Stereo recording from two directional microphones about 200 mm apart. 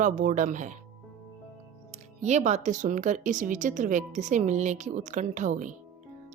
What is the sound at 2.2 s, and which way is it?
A woman's voice, 35° right (ahead or behind).